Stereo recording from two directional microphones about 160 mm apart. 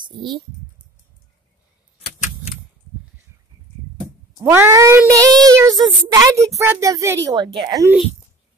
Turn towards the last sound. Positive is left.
turn(degrees=-25)  # may be behind; listen again after turning